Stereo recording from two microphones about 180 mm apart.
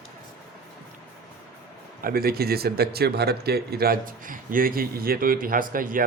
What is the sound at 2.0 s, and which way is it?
Speech, 55° right (ahead or behind).